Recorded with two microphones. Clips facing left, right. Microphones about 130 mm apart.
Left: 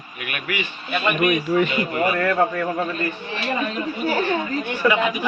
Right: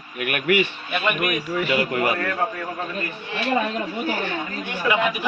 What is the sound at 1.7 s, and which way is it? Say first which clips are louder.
Speech: even; 90° right.